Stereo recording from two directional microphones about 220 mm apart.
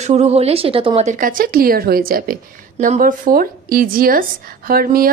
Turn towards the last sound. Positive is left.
turn(degrees=-40)  # may be behind; listen again after turning